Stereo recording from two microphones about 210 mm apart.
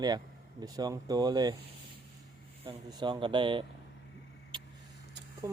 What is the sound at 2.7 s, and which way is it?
Speech, 20° right (ahead or behind).